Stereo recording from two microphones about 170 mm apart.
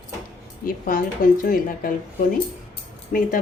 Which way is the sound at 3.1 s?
50° left (ahead or behind).